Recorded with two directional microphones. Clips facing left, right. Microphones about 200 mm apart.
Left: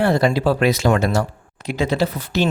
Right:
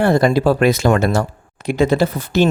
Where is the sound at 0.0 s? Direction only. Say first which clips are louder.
Right 3 dB; 50° right (ahead or behind).